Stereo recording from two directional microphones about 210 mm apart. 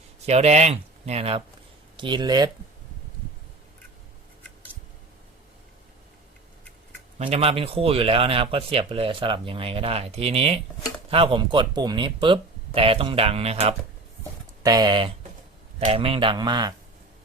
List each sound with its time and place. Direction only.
0.3 s speech: 30° right (ahead or behind)
7.2 s speech: 30° right (ahead or behind)
14.6 s speech: 20° right (ahead or behind)